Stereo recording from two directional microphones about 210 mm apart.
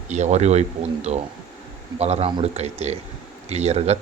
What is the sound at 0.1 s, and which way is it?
Speech, 35° right (ahead or behind).